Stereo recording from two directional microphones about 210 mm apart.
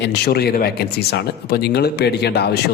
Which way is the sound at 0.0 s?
50° left (ahead or behind).